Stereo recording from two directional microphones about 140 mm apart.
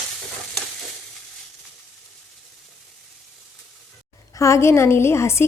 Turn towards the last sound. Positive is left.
turn(degrees=20)  # may be behind; listen again after turning